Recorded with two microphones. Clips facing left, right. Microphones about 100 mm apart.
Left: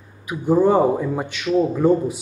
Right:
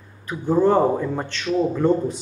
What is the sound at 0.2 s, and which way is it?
A man's voice, 10° left (ahead or behind).